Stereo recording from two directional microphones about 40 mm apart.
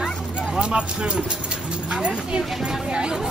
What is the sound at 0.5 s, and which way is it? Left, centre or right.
Speech, right.